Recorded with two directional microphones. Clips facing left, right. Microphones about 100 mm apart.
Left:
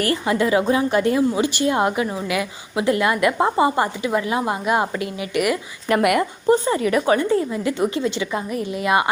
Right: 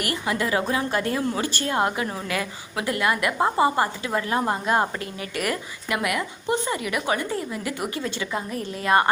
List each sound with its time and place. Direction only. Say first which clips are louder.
0.0 s a woman's voice: left 6 dB; 25° left (ahead or behind)
6.0 s speech: left 9 dB; 60° left (ahead or behind)
6.5 s a woman's voice: left 8 dB; 35° left (ahead or behind); by 9.0 s 15° left (ahead or behind)